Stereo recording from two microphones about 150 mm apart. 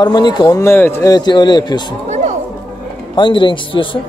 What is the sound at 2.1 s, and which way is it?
Music, 55° right (ahead or behind).